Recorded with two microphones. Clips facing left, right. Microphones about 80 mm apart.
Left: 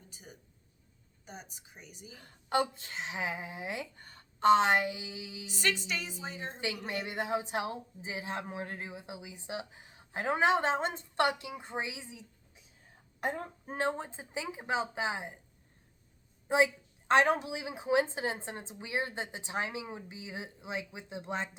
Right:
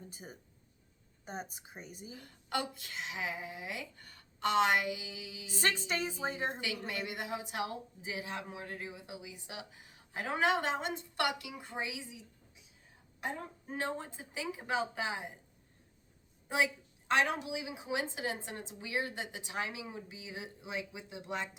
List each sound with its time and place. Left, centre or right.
0.1 s a woman's voice: right
2.1 s speech: left
5.5 s a woman's voice: right
6.6 s speech: left
16.5 s speech: left